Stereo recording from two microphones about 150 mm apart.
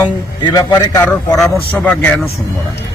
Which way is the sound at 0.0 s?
25° left (ahead or behind).